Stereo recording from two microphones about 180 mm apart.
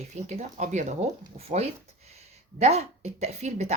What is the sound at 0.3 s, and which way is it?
Speech, 40° right (ahead or behind).